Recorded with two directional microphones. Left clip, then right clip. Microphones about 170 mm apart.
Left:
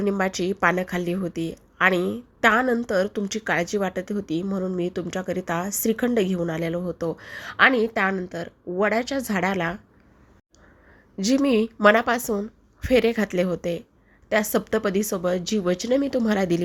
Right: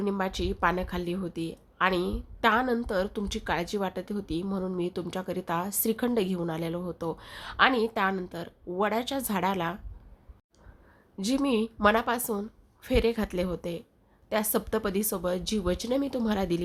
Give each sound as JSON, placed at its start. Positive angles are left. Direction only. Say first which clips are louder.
{"t": 0.0, "sound": "a woman's voice", "louder": "left 6 dB", "side_deg": 15}
{"t": 11.2, "sound": "a woman's voice", "louder": "left 7 dB", "side_deg": 15}